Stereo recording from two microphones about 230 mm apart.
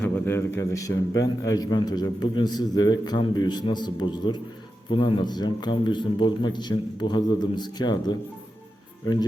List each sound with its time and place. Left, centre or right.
0.0 s a man's voice: centre